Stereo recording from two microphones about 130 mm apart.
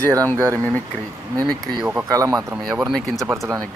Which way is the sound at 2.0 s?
25° right (ahead or behind).